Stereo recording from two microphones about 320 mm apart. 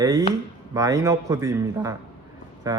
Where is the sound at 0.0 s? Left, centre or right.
Centre.